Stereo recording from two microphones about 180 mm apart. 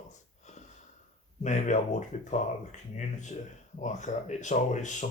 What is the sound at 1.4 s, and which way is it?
Speech, 40° left (ahead or behind).